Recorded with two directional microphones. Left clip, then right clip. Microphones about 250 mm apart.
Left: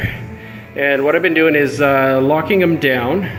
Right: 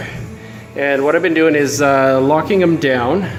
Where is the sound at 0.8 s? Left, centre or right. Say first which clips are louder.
Even; centre.